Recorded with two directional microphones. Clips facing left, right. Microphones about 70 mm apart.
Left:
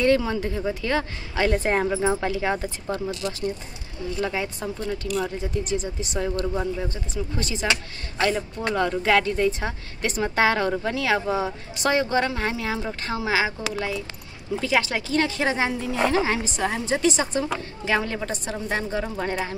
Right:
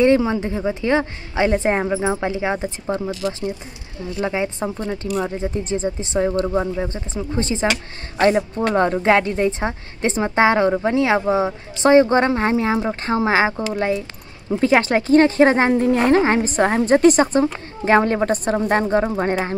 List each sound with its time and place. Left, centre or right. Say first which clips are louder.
0.0 s a woman's voice: right 5 dB; right